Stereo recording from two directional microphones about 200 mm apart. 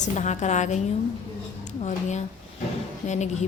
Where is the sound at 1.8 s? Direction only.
35° left (ahead or behind).